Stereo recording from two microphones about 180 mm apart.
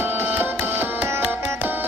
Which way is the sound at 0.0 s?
10° right (ahead or behind).